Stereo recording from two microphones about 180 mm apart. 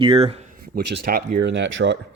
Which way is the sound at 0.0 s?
30° right (ahead or behind).